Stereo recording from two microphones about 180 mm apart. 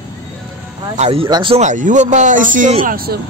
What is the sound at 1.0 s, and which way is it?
Speech, 30° right (ahead or behind).